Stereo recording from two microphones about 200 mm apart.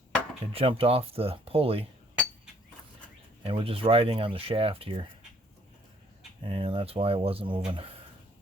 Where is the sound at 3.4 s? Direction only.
25° right (ahead or behind).